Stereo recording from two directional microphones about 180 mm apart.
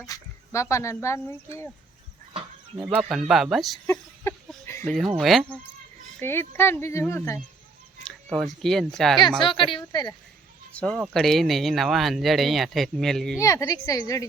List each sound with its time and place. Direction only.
0.0 s speech: 15° left (ahead or behind)
2.7 s speech: 5° right (ahead or behind)
3.8 s a sound: 15° left (ahead or behind)
4.9 s speech: centre (ahead or behind)
6.1 s speech: 10° left (ahead or behind)
8.0 s a sound: centre (ahead or behind)
8.6 s speech: centre (ahead or behind)
9.4 s a woman's voice: 25° left (ahead or behind)
10.8 s speech: 5° left (ahead or behind)
13.4 s a woman's voice: 20° left (ahead or behind)